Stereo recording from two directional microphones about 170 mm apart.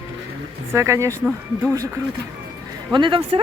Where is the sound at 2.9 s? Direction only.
30° right (ahead or behind).